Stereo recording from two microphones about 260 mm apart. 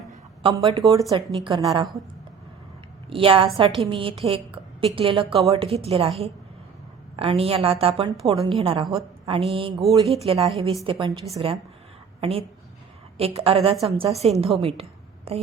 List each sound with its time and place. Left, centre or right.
0.4 s a woman's voice: centre
3.1 s a woman's voice: right